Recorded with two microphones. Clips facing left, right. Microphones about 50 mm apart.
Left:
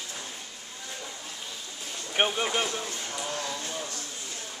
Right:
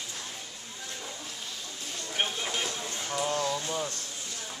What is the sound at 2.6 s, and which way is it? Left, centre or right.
Speech, centre.